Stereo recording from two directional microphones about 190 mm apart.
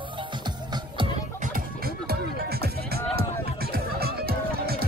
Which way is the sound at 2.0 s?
55° right (ahead or behind).